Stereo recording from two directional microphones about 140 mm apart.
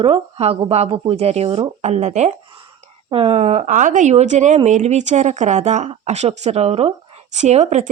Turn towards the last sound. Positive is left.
turn(degrees=-55)  # may be behind; listen again after turning